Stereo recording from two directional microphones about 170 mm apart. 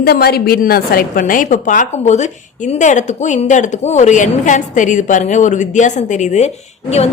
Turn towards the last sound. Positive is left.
turn(degrees=40)  # may be behind; listen again after turning